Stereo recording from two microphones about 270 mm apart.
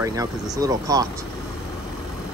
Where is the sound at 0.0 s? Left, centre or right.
Centre.